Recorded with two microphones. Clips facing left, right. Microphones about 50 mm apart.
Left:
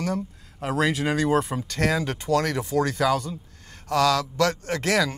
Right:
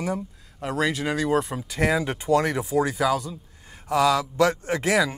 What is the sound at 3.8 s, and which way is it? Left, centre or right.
Speech, centre.